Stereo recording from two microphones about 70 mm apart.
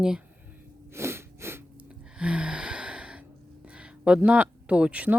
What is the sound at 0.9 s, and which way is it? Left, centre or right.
Sneeze, right.